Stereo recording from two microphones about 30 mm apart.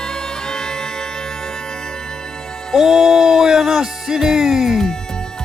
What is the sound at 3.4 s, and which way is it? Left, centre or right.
Music, centre.